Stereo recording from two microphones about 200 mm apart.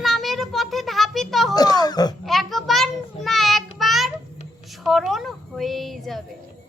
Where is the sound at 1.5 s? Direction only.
20° left (ahead or behind).